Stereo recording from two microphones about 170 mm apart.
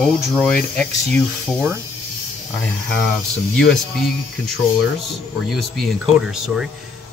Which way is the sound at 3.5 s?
5° left (ahead or behind).